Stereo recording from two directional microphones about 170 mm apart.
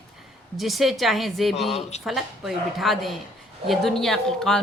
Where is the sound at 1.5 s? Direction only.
40° left (ahead or behind).